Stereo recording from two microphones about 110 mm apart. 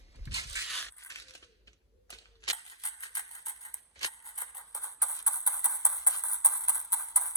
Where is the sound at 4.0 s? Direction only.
30° left (ahead or behind).